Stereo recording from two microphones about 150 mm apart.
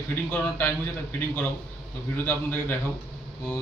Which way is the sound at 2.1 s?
10° left (ahead or behind).